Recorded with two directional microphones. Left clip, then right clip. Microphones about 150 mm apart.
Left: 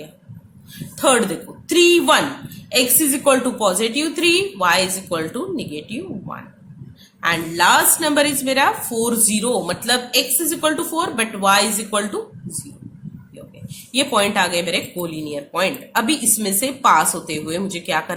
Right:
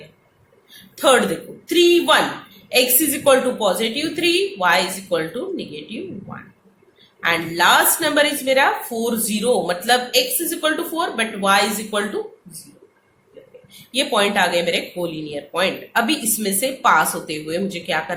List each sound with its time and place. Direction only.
0.9 s a woman's voice: 30° left (ahead or behind)
7.3 s a woman's voice: 30° left (ahead or behind)
13.9 s a woman's voice: 30° left (ahead or behind)